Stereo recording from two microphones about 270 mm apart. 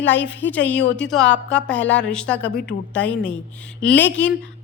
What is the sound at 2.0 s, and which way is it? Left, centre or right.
Speech, centre.